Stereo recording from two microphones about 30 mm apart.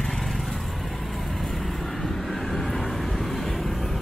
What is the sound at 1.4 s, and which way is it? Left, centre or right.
Vehicle, centre.